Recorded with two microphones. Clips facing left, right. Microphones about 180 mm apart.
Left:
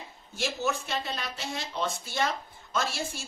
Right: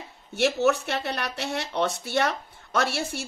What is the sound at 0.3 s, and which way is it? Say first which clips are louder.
Speech: right 9 dB; 70° right (ahead or behind).